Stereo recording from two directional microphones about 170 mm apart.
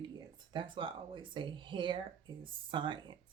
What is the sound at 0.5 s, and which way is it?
Speech, 30° right (ahead or behind).